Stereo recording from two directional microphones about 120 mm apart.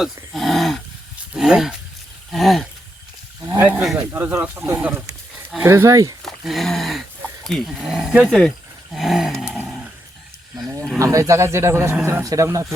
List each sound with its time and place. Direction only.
0.3 s a sound: centre (ahead or behind)
1.3 s speech: 5° right (ahead or behind)
3.4 s wild animals: 25° right (ahead or behind)
4.1 s speech: 15° right (ahead or behind)
6.2 s a sound: centre (ahead or behind)
7.4 s speech: centre (ahead or behind)
8.3 s speech: 5° left (ahead or behind)
11.0 s speech: 25° right (ahead or behind)